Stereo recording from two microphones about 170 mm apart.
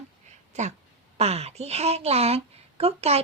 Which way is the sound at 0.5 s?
40° right (ahead or behind).